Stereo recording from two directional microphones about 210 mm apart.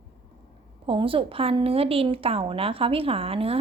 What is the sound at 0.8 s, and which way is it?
A woman's voice, 25° right (ahead or behind).